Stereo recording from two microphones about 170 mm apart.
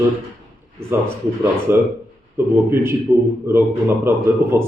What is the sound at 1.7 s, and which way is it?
A man's voice, 15° right (ahead or behind).